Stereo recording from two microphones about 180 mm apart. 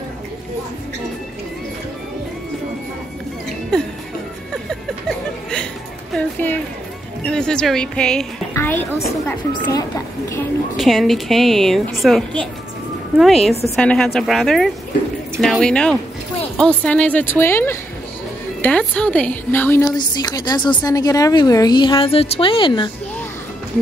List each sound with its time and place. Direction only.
4.6 s a sound: 5° left (ahead or behind)
7.2 s a woman's voice: 5° left (ahead or behind)
10.8 s a woman's voice: centre (ahead or behind)
13.2 s a woman's voice: centre (ahead or behind); by 22.8 s 25° left (ahead or behind)